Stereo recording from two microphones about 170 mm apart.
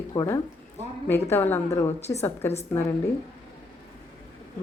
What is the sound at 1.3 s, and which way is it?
Speech, 15° left (ahead or behind).